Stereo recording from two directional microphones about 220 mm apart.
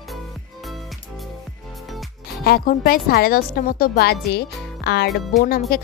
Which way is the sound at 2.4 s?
45° left (ahead or behind).